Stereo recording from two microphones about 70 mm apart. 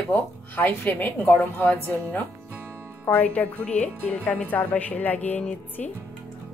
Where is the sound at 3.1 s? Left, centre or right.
Left.